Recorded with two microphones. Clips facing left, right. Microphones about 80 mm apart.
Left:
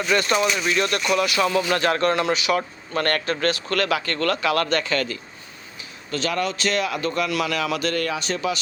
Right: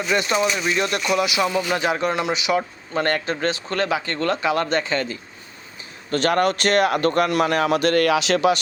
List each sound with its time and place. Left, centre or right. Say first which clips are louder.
0.1 s speech: even; centre
6.1 s a man's voice: right 6 dB; right